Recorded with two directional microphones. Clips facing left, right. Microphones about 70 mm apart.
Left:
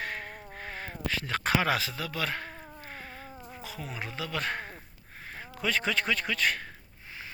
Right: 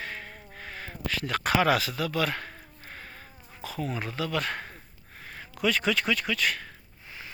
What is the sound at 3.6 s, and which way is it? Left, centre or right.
Speech, centre.